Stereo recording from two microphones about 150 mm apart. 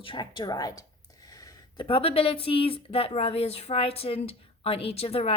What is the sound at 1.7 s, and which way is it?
Speech, 35° left (ahead or behind).